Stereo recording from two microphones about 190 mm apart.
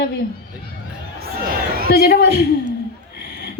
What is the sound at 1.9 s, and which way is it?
Speech, 55° left (ahead or behind).